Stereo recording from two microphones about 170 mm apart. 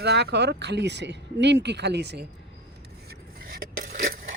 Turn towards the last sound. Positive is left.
turn(degrees=-55)  # may be behind; listen again after turning